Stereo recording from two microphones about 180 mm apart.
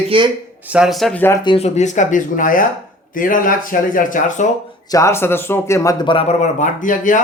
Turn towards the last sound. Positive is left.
turn(degrees=45)  # may be behind; listen again after turning